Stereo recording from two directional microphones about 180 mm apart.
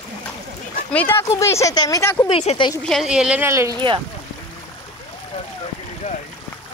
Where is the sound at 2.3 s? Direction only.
35° left (ahead or behind).